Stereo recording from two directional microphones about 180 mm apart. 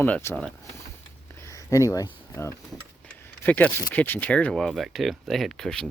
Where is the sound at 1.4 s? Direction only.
15° left (ahead or behind).